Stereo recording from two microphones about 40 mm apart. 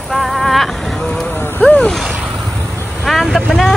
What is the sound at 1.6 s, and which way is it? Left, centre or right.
Vehicle, left.